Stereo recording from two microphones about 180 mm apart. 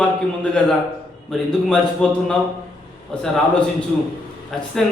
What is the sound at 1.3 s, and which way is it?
Speech, 5° left (ahead or behind).